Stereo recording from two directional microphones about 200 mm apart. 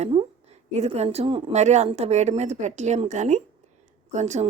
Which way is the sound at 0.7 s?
35° right (ahead or behind).